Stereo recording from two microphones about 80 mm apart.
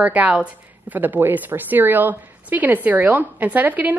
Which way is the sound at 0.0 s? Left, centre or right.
Centre.